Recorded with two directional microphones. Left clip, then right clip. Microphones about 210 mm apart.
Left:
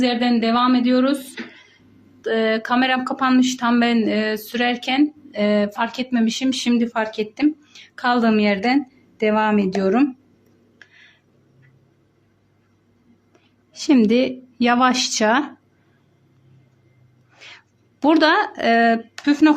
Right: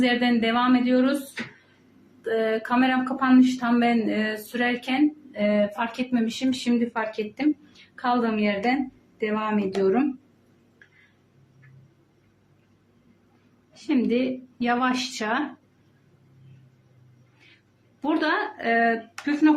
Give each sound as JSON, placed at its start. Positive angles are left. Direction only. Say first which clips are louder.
{"t": 0.0, "sound": "speech", "louder": "left 3 dB", "side_deg": 45}
{"t": 2.2, "sound": "speech", "louder": "left 5 dB", "side_deg": 45}
{"t": 10.8, "sound": "a sound", "louder": "left 7 dB", "side_deg": 55}
{"t": 13.8, "sound": "speech", "louder": "left 7 dB", "side_deg": 50}
{"t": 18.0, "sound": "speech", "louder": "left 9 dB", "side_deg": 50}